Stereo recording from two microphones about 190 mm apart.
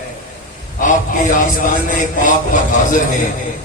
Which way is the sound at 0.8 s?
40° left (ahead or behind).